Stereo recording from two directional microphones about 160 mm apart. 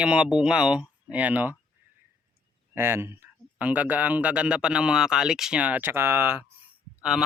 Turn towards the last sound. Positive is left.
turn(degrees=-5)  # may be behind; listen again after turning